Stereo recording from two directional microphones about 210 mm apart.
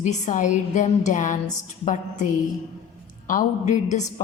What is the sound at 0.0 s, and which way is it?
A woman's voice, 35° left (ahead or behind).